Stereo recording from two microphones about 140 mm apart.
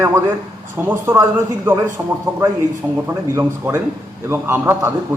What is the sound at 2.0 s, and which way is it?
Speech, 20° right (ahead or behind).